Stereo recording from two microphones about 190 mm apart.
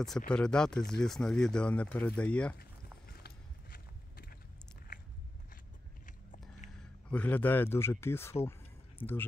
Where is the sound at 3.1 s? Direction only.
55° left (ahead or behind).